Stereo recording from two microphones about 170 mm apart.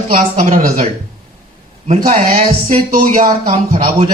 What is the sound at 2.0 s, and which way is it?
Speech, 55° right (ahead or behind).